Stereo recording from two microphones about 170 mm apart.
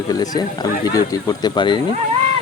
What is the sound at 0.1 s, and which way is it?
Speech, 25° left (ahead or behind).